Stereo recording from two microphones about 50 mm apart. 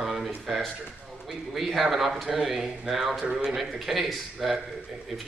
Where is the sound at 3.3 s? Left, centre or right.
Centre.